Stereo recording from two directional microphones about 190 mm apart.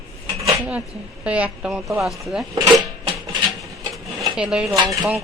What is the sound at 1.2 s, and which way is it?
Speech, 5° right (ahead or behind).